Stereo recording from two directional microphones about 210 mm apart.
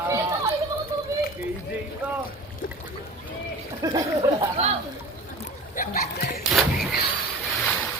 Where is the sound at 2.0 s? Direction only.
5° right (ahead or behind).